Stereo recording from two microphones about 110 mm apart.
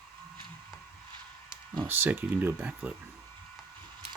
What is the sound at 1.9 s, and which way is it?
Speech, 20° right (ahead or behind).